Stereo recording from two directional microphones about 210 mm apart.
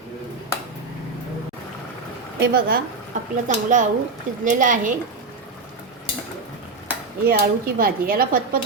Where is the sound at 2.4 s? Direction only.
45° right (ahead or behind).